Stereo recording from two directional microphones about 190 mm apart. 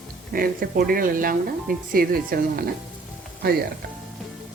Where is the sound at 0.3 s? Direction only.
50° right (ahead or behind).